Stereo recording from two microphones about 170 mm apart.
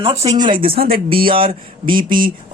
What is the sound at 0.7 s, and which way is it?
Speech, 60° right (ahead or behind).